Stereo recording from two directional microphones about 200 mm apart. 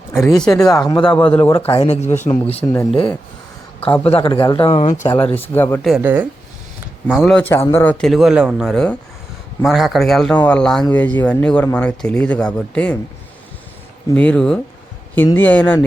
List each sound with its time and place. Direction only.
0.1 s speech: centre (ahead or behind)
0.5 s speech: 15° left (ahead or behind)
1.0 s speech: 5° left (ahead or behind)
1.5 s speech: 25° left (ahead or behind)
2.0 s speech: 10° left (ahead or behind)
4.0 s speech: 30° left (ahead or behind)
5.0 s speech: 10° left (ahead or behind)
5.8 s speech: 5° right (ahead or behind)
14.2 s speech: 5° left (ahead or behind)